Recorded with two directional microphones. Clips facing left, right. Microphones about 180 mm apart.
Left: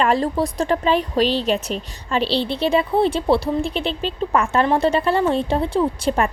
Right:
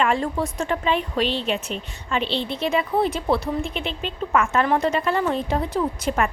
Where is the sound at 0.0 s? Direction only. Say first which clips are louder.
Left 3 dB; 35° left (ahead or behind).